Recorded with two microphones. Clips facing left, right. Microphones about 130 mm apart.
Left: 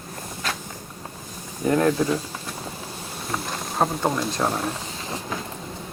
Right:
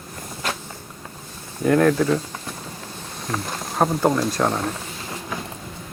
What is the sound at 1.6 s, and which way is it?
Speech, 15° left (ahead or behind).